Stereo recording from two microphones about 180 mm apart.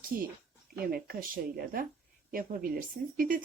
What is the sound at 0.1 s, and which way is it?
Speech, 55° right (ahead or behind).